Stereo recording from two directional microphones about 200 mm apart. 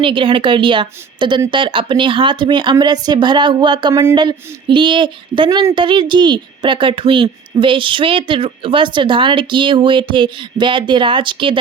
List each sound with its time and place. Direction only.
0.0 s speech: 25° right (ahead or behind)